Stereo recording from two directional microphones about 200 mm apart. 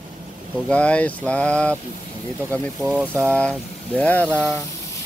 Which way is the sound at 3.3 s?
5° left (ahead or behind).